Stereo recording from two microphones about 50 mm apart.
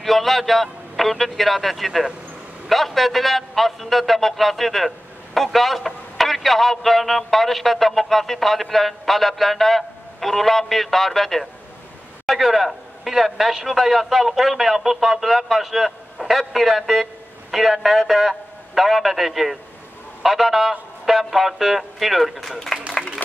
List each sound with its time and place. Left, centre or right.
0.0 s a man's voice: centre